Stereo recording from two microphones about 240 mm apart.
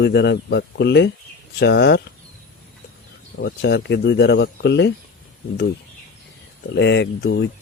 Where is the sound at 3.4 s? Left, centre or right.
Left.